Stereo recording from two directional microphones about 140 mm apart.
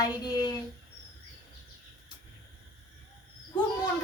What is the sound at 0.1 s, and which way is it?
Child singing, 30° left (ahead or behind).